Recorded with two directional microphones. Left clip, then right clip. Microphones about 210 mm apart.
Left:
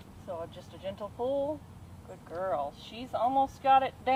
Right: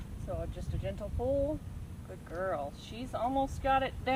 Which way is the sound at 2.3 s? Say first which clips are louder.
Left 3 dB; 15° right (ahead or behind).